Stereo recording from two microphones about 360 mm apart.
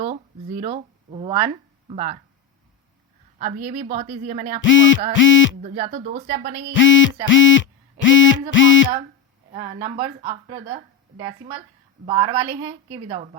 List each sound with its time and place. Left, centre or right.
0.0 s speech: centre
3.3 s a woman's voice: right
4.6 s a sound: left
5.6 s speech: centre
6.7 s a sound: left
9.5 s speech: centre
12.0 s speech: centre